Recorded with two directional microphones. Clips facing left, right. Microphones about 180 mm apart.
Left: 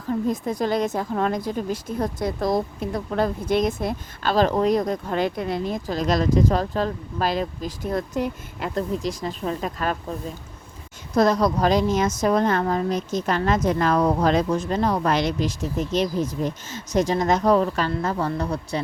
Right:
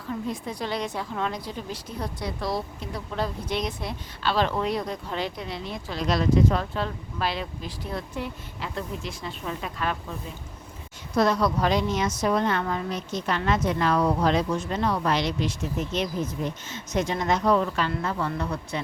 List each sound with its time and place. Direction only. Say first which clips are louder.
0.1 s a woman's voice: left 7 dB; 45° left (ahead or behind)